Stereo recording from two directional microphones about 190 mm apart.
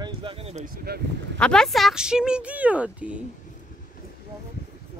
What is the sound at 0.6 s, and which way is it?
Speech, 55° right (ahead or behind).